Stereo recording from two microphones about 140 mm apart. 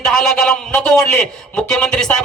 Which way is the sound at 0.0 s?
5° left (ahead or behind).